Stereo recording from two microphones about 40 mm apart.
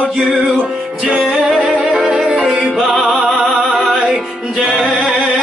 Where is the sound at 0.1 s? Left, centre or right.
Centre.